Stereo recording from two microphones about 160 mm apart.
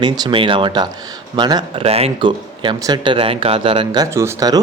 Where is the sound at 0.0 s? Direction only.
30° right (ahead or behind).